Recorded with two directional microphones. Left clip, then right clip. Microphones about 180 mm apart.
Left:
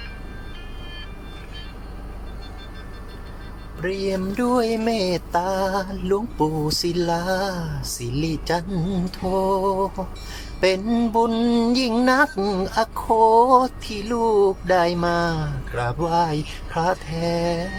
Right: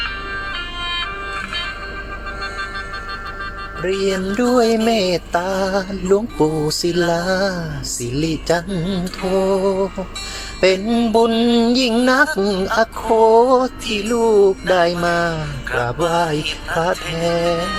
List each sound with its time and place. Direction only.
3.8 s music: 10° right (ahead or behind)
13.1 s a sound: 5° right (ahead or behind)
14.1 s music: 5° right (ahead or behind)